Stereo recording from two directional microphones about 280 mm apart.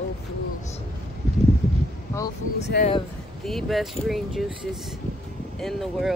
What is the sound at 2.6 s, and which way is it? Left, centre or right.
Speech, left.